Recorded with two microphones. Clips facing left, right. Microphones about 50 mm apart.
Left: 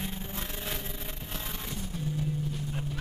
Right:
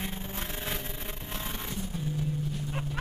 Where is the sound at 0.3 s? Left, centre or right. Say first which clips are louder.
Right 1 dB; right.